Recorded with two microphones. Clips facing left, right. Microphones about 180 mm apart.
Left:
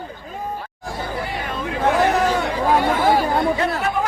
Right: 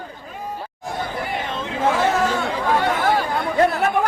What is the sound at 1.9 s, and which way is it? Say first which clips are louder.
Chatter: left 3 dB; 15° left (ahead or behind).